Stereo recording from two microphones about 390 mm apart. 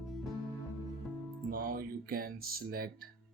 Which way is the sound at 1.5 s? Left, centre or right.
Right.